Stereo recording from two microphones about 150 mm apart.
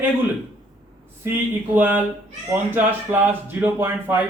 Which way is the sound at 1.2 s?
15° right (ahead or behind).